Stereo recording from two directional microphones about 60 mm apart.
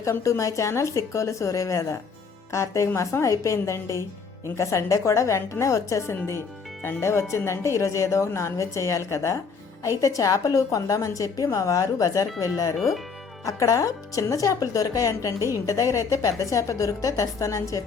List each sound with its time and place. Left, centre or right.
0.0 s speech: left
6.8 s speech: left
10.0 s speech: left